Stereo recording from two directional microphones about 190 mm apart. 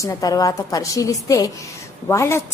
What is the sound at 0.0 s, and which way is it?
A woman's voice, 20° left (ahead or behind).